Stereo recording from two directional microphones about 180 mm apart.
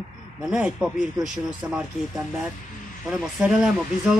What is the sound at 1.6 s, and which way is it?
Speech, 15° right (ahead or behind).